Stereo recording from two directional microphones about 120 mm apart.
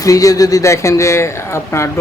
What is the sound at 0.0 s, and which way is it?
Speech, 30° left (ahead or behind).